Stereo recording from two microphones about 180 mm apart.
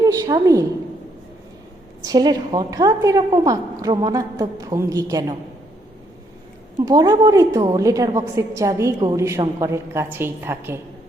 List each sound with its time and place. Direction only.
0.0 s a woman's voice: 20° right (ahead or behind)
2.0 s a woman's voice: 25° right (ahead or behind)
6.7 s a woman's voice: 25° right (ahead or behind)